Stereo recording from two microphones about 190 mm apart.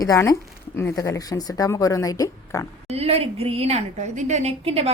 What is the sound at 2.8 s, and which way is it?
A woman's voice, 30° right (ahead or behind).